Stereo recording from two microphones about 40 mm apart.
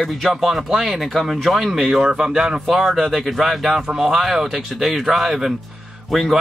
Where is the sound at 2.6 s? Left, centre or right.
Centre.